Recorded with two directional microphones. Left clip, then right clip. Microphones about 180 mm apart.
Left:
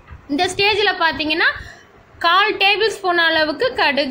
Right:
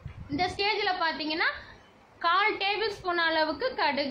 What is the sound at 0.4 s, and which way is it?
A woman's voice, 25° left (ahead or behind).